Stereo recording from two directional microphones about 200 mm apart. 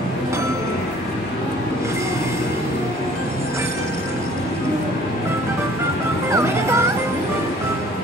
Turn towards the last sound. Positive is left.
turn(degrees=-15)  # may be behind; listen again after turning